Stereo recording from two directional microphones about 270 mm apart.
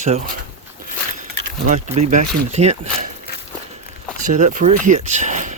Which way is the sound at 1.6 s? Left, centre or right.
Right.